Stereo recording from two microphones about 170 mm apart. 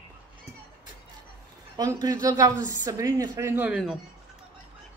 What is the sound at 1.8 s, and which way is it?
Speech, 20° right (ahead or behind).